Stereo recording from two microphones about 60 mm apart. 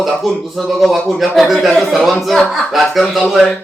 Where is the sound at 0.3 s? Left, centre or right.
Centre.